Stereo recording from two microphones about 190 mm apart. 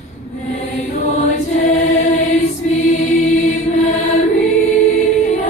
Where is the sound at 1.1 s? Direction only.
40° left (ahead or behind).